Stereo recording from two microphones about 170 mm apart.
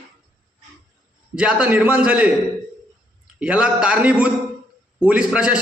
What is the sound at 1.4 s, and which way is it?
Speech, 5° right (ahead or behind).